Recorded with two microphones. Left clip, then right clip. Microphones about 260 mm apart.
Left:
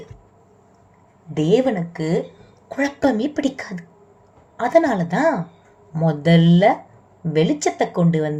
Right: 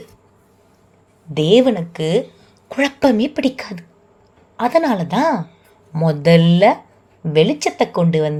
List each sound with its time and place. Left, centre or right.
1.3 s speech: right